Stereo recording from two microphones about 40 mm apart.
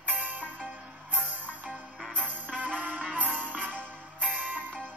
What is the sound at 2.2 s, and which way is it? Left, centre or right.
Music, right.